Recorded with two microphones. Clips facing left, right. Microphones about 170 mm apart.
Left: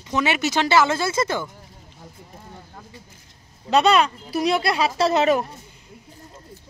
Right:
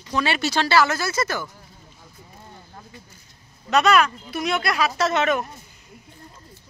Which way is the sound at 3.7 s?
30° left (ahead or behind).